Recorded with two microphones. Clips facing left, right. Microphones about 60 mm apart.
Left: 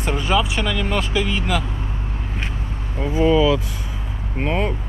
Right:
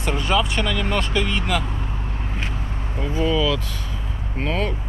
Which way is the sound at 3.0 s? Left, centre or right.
Left.